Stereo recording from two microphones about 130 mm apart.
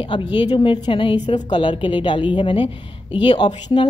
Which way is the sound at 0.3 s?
35° left (ahead or behind).